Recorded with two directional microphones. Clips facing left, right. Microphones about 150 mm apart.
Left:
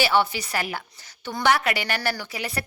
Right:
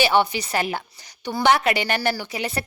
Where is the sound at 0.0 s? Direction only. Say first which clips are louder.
Right 2 dB; 20° right (ahead or behind).